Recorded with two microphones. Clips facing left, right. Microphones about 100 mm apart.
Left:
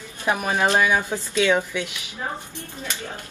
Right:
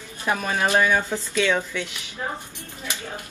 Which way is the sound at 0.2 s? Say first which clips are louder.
Left 2 dB; 15° left (ahead or behind).